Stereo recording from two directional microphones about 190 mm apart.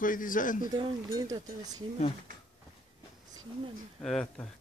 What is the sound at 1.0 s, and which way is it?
Speech, 20° right (ahead or behind).